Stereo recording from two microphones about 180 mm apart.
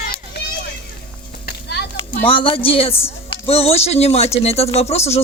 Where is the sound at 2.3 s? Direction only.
30° left (ahead or behind).